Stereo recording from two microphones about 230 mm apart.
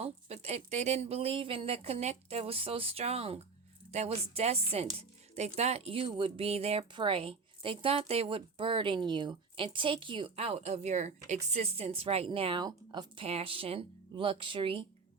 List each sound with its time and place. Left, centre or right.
0.0 s speech: right
4.9 s music: right
5.5 s speech: right